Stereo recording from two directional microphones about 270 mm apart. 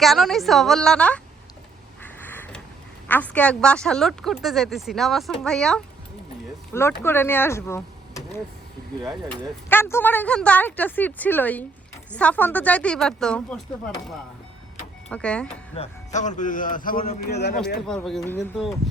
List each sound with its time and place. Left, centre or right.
0.0 s speech: centre
2.2 s vehicle: centre
3.1 s speech: centre
9.6 s speech: centre
15.1 s speech: centre
15.7 s a man's voice: left
17.8 s speech: centre